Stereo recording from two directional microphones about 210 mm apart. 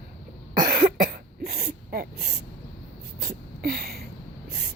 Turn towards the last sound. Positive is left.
turn(degrees=-50)  # may be behind; listen again after turning